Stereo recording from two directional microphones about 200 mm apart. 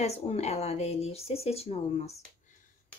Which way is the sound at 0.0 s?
30° left (ahead or behind).